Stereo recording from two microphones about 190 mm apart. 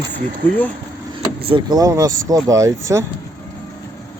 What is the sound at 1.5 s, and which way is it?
Speech, 25° right (ahead or behind).